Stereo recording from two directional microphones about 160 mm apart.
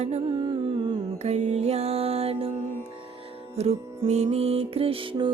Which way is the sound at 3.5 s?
40° right (ahead or behind).